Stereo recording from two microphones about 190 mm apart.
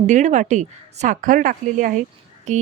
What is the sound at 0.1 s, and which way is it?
A woman's voice, 40° right (ahead or behind).